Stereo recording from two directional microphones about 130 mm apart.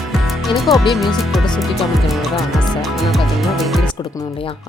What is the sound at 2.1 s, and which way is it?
Speech, centre (ahead or behind).